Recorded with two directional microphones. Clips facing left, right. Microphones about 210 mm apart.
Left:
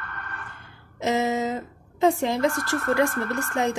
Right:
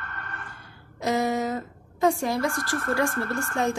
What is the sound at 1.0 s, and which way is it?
A woman's voice, 20° left (ahead or behind).